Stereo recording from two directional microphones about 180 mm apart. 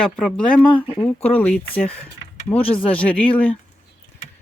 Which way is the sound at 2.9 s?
5° left (ahead or behind).